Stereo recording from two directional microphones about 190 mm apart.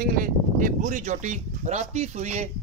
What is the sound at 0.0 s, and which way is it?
Speech, 50° right (ahead or behind).